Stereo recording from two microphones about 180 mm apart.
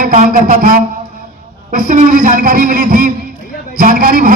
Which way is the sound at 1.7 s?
45° right (ahead or behind).